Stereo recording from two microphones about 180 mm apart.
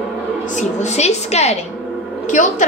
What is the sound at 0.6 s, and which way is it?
A woman's voice, 40° left (ahead or behind).